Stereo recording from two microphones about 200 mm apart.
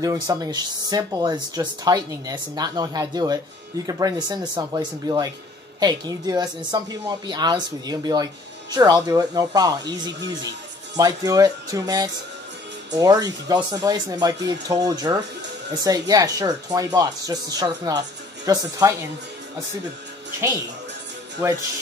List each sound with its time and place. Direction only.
0.0 s speech: 20° right (ahead or behind)
21.4 s speech: 15° right (ahead or behind)